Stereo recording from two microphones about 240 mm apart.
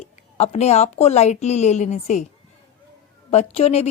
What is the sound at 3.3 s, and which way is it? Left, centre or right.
Speech, left.